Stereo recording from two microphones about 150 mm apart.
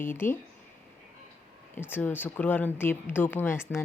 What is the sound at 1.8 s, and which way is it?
Speech, 15° left (ahead or behind).